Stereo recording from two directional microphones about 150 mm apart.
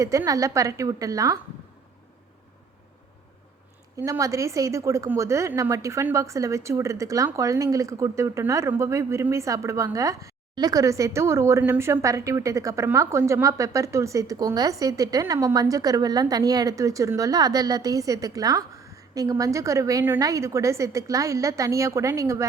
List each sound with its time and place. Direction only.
0.0 s speech: 20° right (ahead or behind)
3.9 s speech: 20° right (ahead or behind)